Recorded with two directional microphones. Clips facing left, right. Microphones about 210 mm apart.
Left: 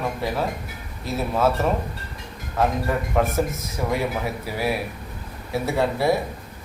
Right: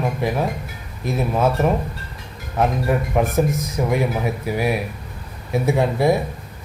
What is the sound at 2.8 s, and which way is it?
Speech, 15° right (ahead or behind).